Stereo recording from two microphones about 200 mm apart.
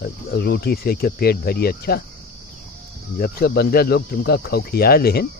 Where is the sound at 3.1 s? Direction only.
50° left (ahead or behind).